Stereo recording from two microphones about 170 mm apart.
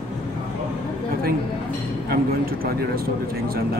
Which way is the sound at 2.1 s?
65° right (ahead or behind).